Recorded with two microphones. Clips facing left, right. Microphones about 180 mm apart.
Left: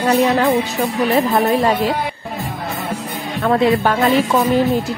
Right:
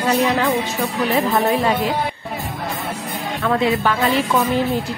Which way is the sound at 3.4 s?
40° left (ahead or behind).